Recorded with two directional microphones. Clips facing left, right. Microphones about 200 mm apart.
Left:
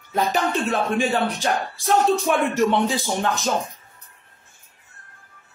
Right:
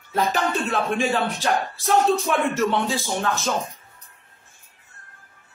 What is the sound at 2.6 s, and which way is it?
Speech, 15° left (ahead or behind).